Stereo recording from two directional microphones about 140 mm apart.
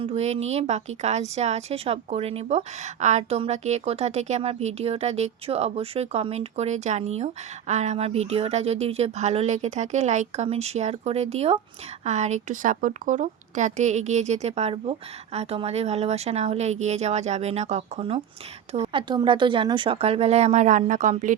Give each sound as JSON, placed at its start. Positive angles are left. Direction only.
{"t": 0.0, "sound": "a woman's voice", "side_deg": -50}
{"t": 19.0, "sound": "a woman's voice", "side_deg": -35}